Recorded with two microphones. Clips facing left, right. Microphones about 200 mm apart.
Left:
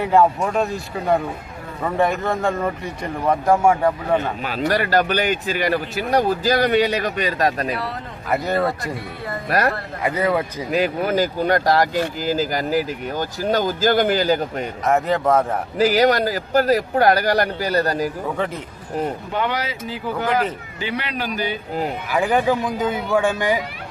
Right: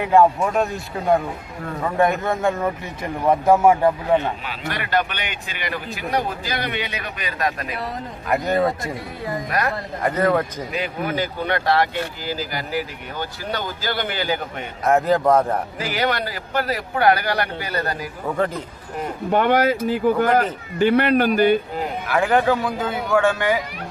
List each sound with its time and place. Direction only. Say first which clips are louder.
0.0 s speech: right 1 dB; centre (ahead or behind)
4.4 s speech: left 8 dB; 40° left (ahead or behind)
8.3 s speech: right 1 dB; centre (ahead or behind)
9.5 s speech: left 5 dB; 40° left (ahead or behind)
10.0 s a man's voice: right 1 dB; 10° left (ahead or behind)
11.0 s speech: left 5 dB; 40° left (ahead or behind)
14.8 s speech: right 2 dB; centre (ahead or behind)
15.8 s speech: left 12 dB; 40° left (ahead or behind)
18.4 s speech: right 3 dB; centre (ahead or behind)
19.3 s speech: right 7 dB; 50° right (ahead or behind)
22.1 s a man's voice: right 1 dB; 15° left (ahead or behind)